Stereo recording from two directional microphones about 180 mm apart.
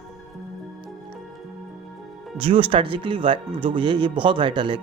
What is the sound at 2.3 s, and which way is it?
Speech, 30° right (ahead or behind).